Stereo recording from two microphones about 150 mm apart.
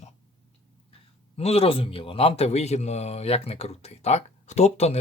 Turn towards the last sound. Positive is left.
turn(degrees=45)  # may be behind; listen again after turning